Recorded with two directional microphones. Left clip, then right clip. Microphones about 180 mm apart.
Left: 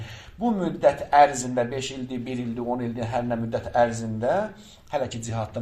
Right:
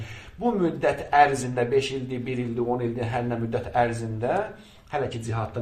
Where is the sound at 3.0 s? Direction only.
40° left (ahead or behind).